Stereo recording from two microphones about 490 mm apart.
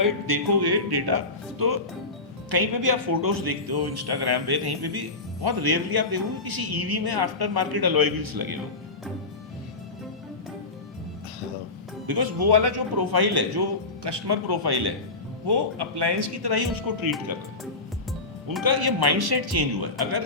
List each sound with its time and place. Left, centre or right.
0.0 s speech: right
12.0 s speech: right
18.6 s speech: right